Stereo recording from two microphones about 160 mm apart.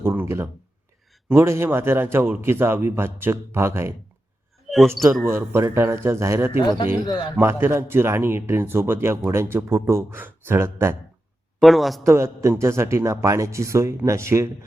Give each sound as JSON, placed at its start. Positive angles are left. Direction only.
{"t": 0.0, "sound": "a sound", "side_deg": -15}
{"t": 1.3, "sound": "speech", "side_deg": -15}
{"t": 4.7, "sound": "a sound", "side_deg": 0}
{"t": 5.2, "sound": "speech", "side_deg": -15}
{"t": 6.6, "sound": "a man's voice", "side_deg": 30}
{"t": 7.3, "sound": "speech", "side_deg": -15}
{"t": 11.6, "sound": "speech", "side_deg": 0}
{"t": 12.0, "sound": "speech", "side_deg": -20}